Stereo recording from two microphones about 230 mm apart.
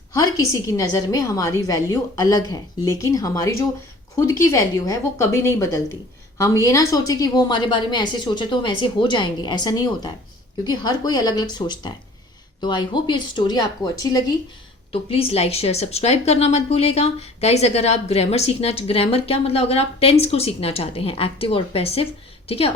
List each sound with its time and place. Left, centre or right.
0.1 s a woman's voice: centre